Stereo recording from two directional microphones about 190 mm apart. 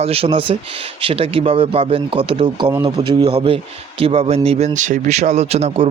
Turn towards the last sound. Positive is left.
turn(degrees=-35)  # may be behind; listen again after turning